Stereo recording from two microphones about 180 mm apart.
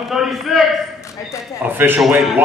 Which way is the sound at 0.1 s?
Centre (ahead or behind).